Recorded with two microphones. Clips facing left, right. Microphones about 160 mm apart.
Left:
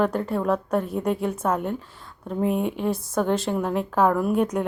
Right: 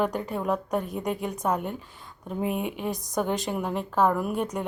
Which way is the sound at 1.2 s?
15° right (ahead or behind).